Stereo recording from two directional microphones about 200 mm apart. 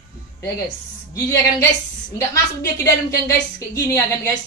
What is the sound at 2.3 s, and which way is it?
Speech, 15° left (ahead or behind).